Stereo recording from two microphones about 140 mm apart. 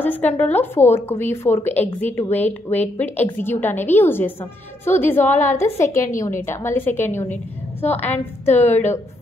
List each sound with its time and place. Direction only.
0.0 s a woman's voice: 10° left (ahead or behind)